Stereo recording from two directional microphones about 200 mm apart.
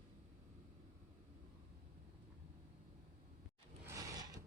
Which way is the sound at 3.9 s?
15° right (ahead or behind).